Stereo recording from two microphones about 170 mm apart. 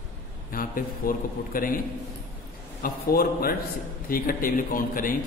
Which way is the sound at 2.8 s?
60° left (ahead or behind).